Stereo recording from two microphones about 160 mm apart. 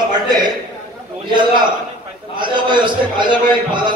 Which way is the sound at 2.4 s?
30° right (ahead or behind).